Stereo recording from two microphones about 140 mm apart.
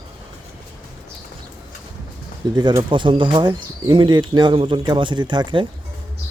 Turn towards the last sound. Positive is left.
turn(degrees=-35)  # may be behind; listen again after turning